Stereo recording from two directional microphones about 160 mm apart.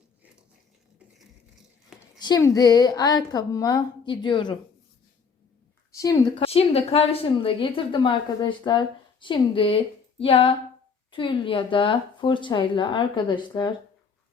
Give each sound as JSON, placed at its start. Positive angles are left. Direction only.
{"t": 2.1, "sound": "a woman's voice", "side_deg": 25}
{"t": 5.9, "sound": "a woman's voice", "side_deg": 20}
{"t": 6.3, "sound": "speech", "side_deg": 35}